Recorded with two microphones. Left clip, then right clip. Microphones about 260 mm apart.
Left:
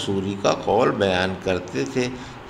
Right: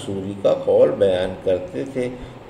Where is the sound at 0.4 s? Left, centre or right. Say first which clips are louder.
Right 5 dB; left.